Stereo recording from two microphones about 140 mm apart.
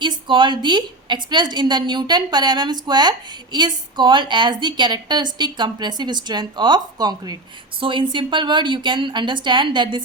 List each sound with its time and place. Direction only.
0.0 s a woman's voice: 35° right (ahead or behind)